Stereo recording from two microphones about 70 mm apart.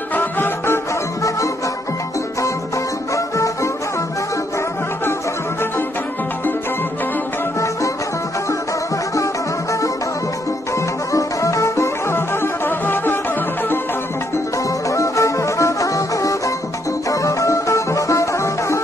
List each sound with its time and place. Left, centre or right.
0.1 s music: left
3.3 s music: left
9.1 s music: left
11.1 s music: left
14.9 s music: left